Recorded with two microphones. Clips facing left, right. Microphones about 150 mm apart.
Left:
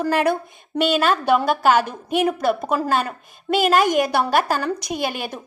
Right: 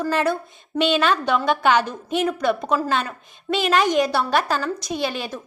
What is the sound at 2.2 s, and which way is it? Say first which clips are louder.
Speech: left 3 dB; 55° left (ahead or behind).